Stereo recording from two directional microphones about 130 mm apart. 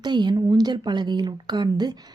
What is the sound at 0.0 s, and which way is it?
A woman's voice, 35° right (ahead or behind).